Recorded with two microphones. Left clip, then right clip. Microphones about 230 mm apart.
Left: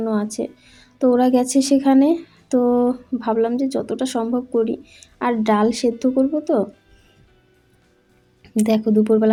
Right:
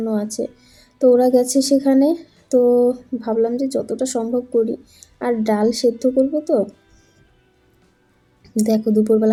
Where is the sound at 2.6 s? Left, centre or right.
Left.